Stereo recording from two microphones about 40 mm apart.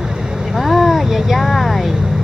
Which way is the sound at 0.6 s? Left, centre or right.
Centre.